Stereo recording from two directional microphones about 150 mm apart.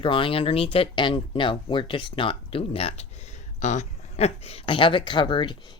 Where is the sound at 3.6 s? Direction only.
50° left (ahead or behind); by 5.6 s 30° left (ahead or behind).